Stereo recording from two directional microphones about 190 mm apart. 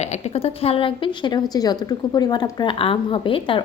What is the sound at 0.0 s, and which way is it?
A woman's voice, 35° left (ahead or behind).